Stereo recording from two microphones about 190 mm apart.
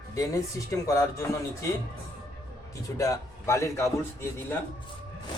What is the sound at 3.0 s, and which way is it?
A man's voice, 15° left (ahead or behind).